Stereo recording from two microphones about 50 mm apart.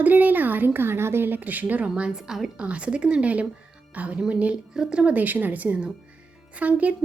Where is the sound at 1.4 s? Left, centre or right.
Right.